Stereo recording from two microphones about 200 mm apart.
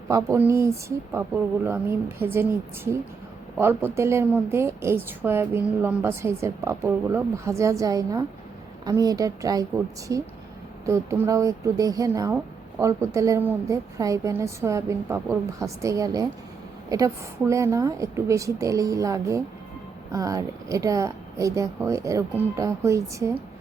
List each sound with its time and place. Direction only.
0.1 s a woman's voice: 15° right (ahead or behind)
10.8 s a woman's voice: 15° right (ahead or behind)